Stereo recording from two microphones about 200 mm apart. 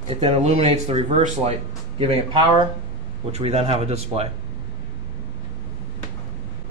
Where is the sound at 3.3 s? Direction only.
30° right (ahead or behind).